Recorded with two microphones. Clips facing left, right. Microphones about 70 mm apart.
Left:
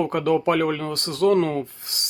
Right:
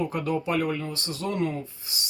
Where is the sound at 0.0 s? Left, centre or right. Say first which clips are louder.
Left 7 dB; left.